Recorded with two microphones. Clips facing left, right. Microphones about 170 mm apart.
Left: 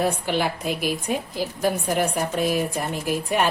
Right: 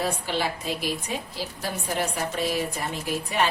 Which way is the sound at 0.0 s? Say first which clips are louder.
Left 4 dB; 55° left (ahead or behind).